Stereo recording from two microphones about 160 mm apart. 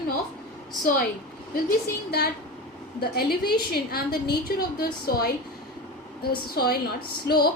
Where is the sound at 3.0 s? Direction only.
75° left (ahead or behind).